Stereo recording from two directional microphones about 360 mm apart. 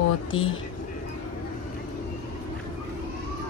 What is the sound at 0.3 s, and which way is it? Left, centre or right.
Speech, left.